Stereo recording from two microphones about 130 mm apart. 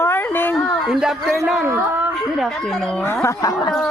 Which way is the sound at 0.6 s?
Centre (ahead or behind).